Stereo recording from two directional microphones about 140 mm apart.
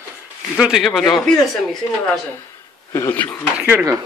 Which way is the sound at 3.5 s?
15° right (ahead or behind).